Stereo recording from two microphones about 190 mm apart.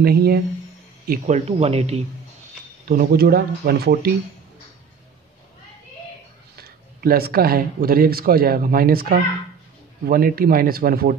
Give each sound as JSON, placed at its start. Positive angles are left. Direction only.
{"t": 0.0, "sound": "speech", "side_deg": -55}
{"t": 1.0, "sound": "speech", "side_deg": -40}
{"t": 2.9, "sound": "speech", "side_deg": -50}
{"t": 6.5, "sound": "speech", "side_deg": -50}